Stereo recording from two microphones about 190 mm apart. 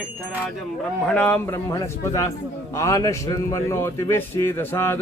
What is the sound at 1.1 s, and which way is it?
A man's voice, 10° left (ahead or behind).